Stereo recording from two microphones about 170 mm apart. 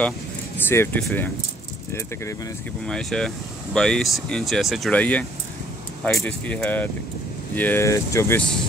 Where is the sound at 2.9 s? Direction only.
5° left (ahead or behind).